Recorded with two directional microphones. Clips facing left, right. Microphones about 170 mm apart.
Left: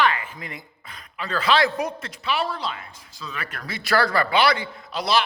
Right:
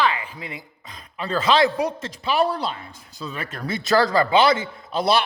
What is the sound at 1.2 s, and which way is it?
A man's voice, 30° right (ahead or behind).